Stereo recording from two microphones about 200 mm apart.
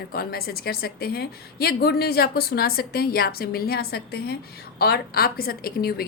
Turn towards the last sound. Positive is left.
turn(degrees=50)  # may be behind; listen again after turning